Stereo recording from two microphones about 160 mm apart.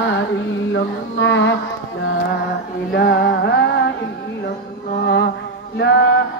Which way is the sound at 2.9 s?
85° left.